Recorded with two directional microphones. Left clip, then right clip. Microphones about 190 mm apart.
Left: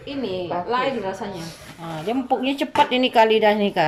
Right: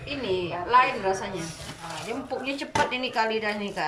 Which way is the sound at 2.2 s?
40° left (ahead or behind).